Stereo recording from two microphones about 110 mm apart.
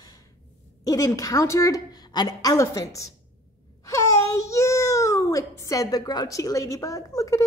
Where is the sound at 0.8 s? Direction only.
35° left (ahead or behind).